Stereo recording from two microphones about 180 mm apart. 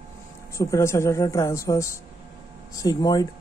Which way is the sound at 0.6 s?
15° left (ahead or behind).